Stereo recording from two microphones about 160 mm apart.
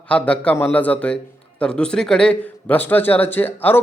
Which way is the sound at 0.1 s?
10° left (ahead or behind).